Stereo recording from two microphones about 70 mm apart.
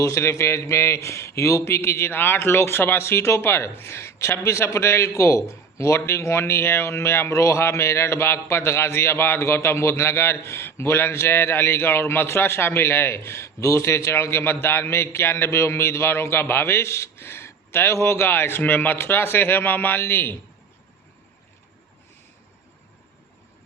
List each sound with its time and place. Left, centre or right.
0.0 s speech: left